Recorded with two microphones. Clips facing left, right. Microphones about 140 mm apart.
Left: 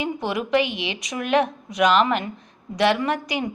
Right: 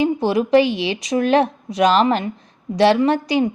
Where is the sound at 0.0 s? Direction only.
35° right (ahead or behind).